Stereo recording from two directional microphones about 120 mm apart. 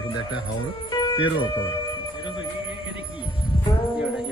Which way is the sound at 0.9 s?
40° left (ahead or behind).